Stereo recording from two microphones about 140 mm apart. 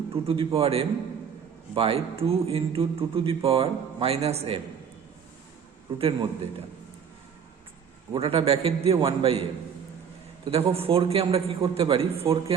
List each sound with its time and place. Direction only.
0.1 s a man's voice: 40° right (ahead or behind)
6.0 s a man's voice: 40° right (ahead or behind)
8.1 s a man's voice: 45° right (ahead or behind)